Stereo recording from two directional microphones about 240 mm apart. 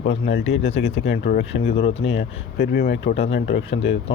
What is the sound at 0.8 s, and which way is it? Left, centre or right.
Speech, left.